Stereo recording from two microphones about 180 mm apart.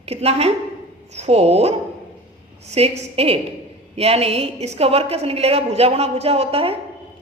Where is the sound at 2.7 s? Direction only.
35° right (ahead or behind).